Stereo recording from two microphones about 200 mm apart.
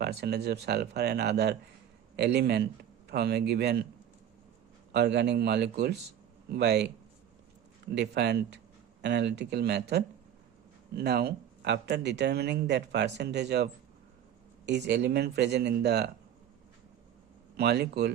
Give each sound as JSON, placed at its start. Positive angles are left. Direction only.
{"t": 0.0, "sound": "speech", "side_deg": -55}
{"t": 4.9, "sound": "speech", "side_deg": -55}
{"t": 7.9, "sound": "speech", "side_deg": -60}
{"t": 14.7, "sound": "speech", "side_deg": -60}
{"t": 17.6, "sound": "speech", "side_deg": -55}